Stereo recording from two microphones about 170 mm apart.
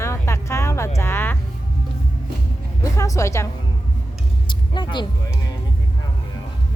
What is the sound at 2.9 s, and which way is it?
Speech, 20° left (ahead or behind).